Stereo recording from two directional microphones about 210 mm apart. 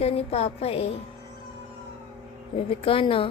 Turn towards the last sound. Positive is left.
turn(degrees=25)  # may be behind; listen again after turning